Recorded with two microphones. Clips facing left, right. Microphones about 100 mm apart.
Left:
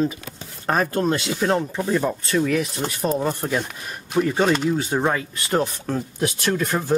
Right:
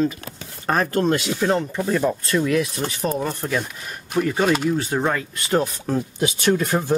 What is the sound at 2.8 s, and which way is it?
Speech, 20° left (ahead or behind).